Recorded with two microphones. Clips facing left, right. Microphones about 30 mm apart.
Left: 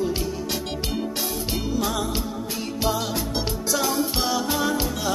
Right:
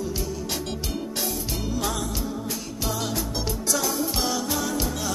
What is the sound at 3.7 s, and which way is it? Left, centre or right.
Music, left.